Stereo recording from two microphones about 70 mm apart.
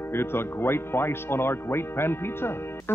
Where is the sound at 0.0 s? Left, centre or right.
Left.